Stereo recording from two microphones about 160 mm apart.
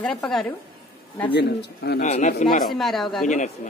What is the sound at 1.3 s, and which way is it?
Speech, 90° left.